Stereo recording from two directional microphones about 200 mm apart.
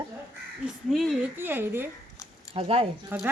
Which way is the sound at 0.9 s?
Centre (ahead or behind).